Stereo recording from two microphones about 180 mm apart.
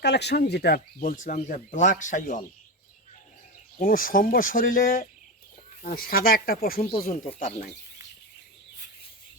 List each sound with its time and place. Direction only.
0.0 s speech: 70° left (ahead or behind); by 2.4 s 45° left (ahead or behind)
3.8 s speech: 50° left (ahead or behind)